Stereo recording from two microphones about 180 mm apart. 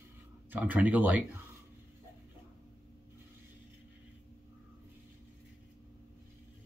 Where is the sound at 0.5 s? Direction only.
10° right (ahead or behind).